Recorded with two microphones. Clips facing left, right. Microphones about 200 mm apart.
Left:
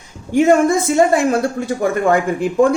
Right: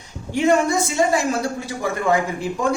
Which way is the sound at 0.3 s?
50° left (ahead or behind).